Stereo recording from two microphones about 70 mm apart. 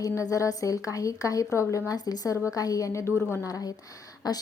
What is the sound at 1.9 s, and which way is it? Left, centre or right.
A woman's voice, left.